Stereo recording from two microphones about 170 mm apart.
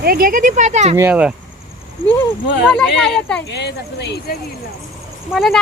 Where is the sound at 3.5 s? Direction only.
85° left.